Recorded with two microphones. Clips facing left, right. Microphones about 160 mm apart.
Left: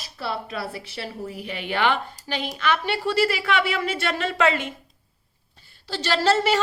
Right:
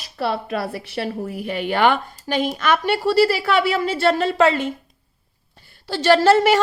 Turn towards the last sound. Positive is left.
turn(degrees=-50)  # may be behind; listen again after turning